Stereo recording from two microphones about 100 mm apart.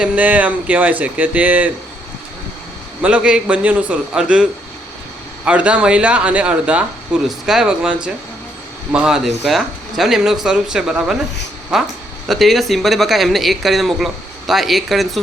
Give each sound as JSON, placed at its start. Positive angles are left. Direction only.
{"t": 0.0, "sound": "speech", "side_deg": -15}
{"t": 3.0, "sound": "speech", "side_deg": -10}
{"t": 5.5, "sound": "speech", "side_deg": -10}
{"t": 12.3, "sound": "speech", "side_deg": 0}